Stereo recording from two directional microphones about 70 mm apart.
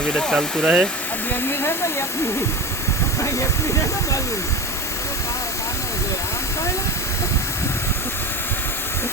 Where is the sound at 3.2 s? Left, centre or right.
Left.